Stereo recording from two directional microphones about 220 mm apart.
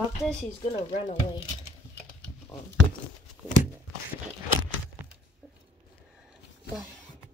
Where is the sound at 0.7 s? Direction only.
30° left (ahead or behind).